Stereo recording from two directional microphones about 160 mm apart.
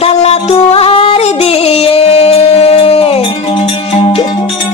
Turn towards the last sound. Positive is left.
turn(degrees=35)  # may be behind; listen again after turning